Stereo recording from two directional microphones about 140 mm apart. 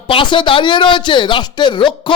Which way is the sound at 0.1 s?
35° left (ahead or behind).